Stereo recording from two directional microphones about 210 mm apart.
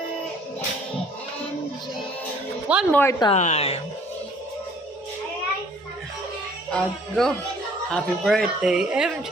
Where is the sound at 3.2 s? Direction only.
30° left (ahead or behind).